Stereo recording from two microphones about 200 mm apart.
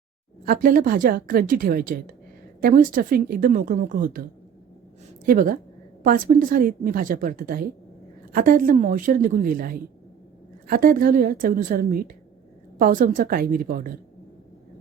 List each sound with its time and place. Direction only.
0.4 s a woman's voice: 45° right (ahead or behind)